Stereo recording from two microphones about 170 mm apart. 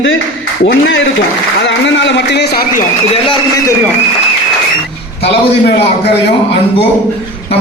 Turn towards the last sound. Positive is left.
turn(degrees=80)